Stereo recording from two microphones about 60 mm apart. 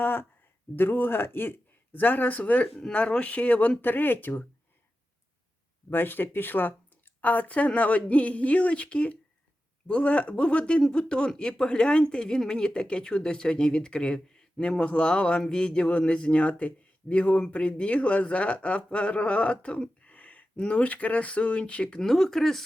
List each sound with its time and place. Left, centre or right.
0.0 s a man's voice: left
5.9 s a man's voice: left; by 22.6 s centre